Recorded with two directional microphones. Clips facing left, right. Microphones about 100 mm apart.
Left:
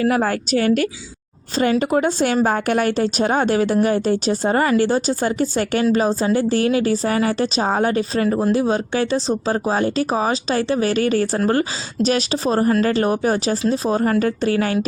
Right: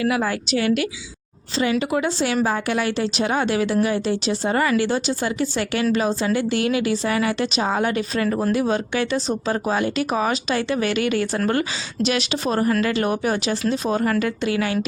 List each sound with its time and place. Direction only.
0.0 s a woman's voice: 45° left (ahead or behind)